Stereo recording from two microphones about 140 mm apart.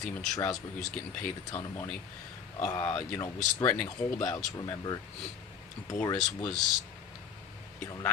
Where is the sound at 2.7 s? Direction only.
30° left (ahead or behind).